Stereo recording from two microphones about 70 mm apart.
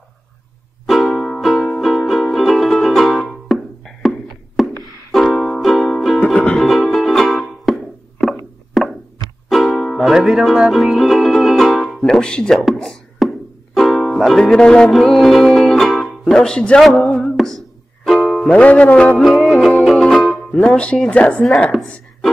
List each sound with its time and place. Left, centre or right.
0.8 s music: centre
6.6 s music: centre
8.8 s a sound: centre
9.5 s music: centre
9.9 s speech: centre
14.0 s music: centre
18.5 s speech: centre
19.1 s music: centre
19.8 s speech: centre